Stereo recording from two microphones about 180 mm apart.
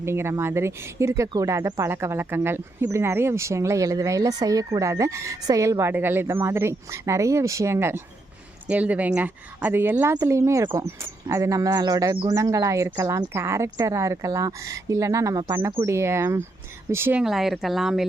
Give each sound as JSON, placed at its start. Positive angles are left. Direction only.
{"t": 0.0, "sound": "speech", "side_deg": -15}